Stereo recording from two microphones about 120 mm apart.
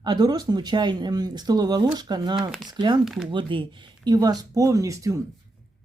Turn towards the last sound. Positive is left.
turn(degrees=-25)  # may be behind; listen again after turning